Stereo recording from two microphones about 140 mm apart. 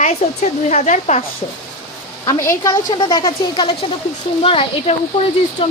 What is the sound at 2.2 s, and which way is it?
A woman's voice, 25° left (ahead or behind).